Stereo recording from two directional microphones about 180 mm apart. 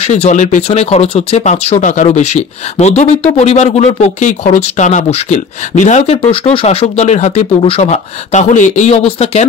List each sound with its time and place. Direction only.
0.0 s speech: 35° left (ahead or behind)